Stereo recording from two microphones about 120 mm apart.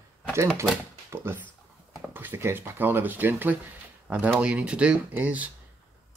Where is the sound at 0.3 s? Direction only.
20° right (ahead or behind).